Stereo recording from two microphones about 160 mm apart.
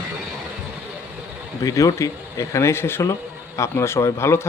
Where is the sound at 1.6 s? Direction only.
20° left (ahead or behind).